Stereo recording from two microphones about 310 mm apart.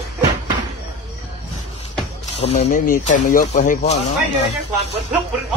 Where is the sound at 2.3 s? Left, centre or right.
Left.